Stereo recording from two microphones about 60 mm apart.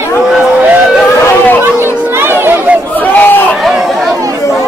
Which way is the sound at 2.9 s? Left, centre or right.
Left.